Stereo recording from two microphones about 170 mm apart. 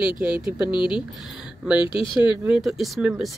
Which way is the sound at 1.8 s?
30° left (ahead or behind).